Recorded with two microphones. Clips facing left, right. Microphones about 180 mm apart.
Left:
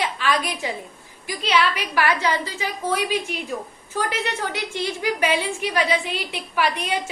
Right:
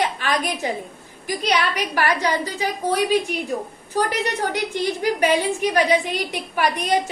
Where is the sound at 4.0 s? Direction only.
40° right (ahead or behind).